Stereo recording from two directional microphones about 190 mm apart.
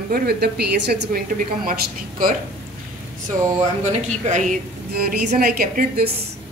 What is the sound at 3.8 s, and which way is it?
Speech, 40° right (ahead or behind).